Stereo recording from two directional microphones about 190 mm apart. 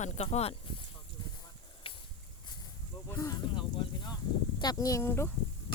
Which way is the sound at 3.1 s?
15° left (ahead or behind).